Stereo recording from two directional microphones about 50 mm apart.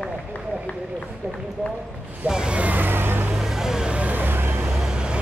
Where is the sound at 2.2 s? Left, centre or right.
Centre.